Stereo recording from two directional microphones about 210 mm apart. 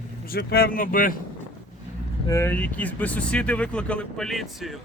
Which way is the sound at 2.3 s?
10° left (ahead or behind).